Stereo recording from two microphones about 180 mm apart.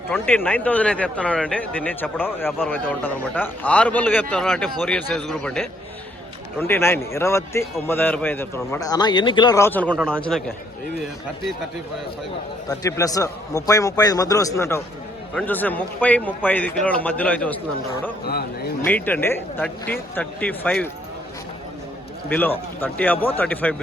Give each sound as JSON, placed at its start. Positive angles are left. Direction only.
{"t": 0.1, "sound": "a man's voice", "side_deg": 10}
{"t": 12.8, "sound": "a man's voice", "side_deg": 20}
{"t": 18.8, "sound": "a man's voice", "side_deg": 10}
{"t": 22.3, "sound": "a man's voice", "side_deg": 10}